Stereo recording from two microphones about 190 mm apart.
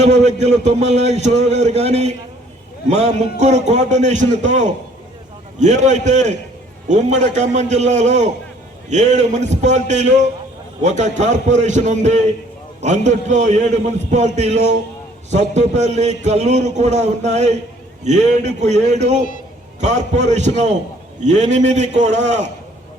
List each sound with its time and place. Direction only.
0.0 s a man's voice: 35° right (ahead or behind)